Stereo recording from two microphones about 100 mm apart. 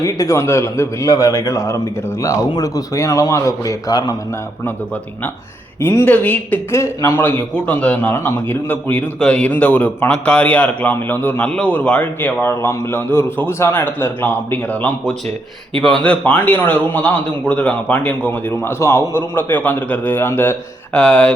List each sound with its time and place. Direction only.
0.0 s a man's voice: 30° left (ahead or behind)
5.8 s a man's voice: 25° left (ahead or behind)
21.0 s a man's voice: 10° left (ahead or behind)